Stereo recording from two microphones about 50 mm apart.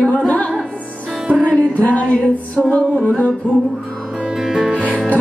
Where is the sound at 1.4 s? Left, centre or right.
Left.